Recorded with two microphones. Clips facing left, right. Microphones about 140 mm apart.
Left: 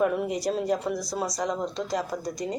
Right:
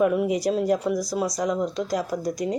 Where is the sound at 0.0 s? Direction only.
5° right (ahead or behind).